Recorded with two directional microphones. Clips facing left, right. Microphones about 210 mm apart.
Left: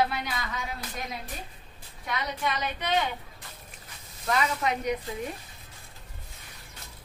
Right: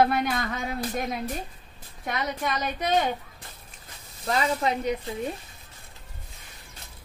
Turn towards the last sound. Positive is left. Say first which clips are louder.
# right 2 dB
turn(degrees=-30)  # may be behind; listen again after turning